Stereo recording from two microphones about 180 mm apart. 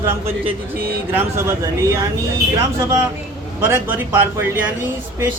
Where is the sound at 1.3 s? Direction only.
15° right (ahead or behind).